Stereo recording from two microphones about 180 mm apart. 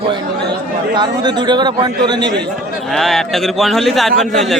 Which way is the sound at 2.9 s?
Centre (ahead or behind).